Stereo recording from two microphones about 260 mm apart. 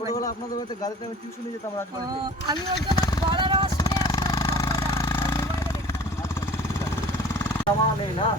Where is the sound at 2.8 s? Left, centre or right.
Centre.